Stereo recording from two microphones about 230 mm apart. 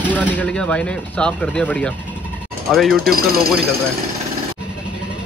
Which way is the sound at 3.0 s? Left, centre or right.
Right.